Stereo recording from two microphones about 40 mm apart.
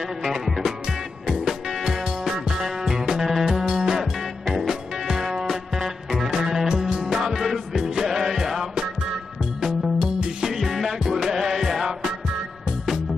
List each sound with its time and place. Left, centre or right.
0.2 s music: centre
7.1 s music: centre
10.4 s music: centre